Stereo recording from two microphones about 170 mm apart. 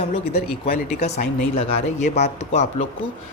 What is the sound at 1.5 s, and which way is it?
Speech, 35° left (ahead or behind).